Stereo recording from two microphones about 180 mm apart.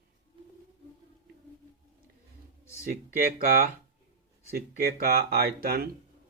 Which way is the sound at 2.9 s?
50° right (ahead or behind).